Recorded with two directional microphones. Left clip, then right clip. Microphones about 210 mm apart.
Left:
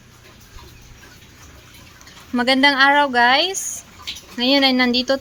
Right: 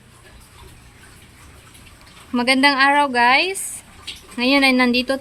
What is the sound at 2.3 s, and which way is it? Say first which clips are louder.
A woman's voice: even; centre (ahead or behind).